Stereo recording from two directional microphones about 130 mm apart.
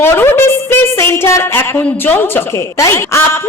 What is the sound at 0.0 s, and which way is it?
A woman's voice, 15° left (ahead or behind).